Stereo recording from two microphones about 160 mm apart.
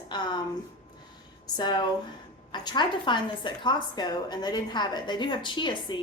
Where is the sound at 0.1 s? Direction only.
25° left (ahead or behind).